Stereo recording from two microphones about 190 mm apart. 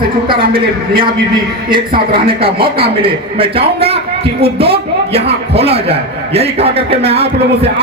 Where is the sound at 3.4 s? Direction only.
30° right (ahead or behind).